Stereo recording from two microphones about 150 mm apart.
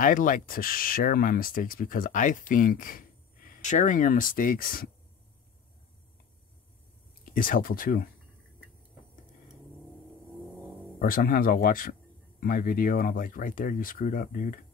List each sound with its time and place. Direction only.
0.0 s speech: 65° left (ahead or behind)
7.2 s speech: 70° left (ahead or behind)
11.0 s speech: 70° left (ahead or behind)